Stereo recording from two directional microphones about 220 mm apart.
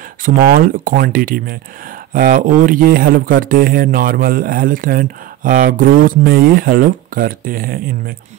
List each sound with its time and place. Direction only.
0.2 s speech: 40° right (ahead or behind)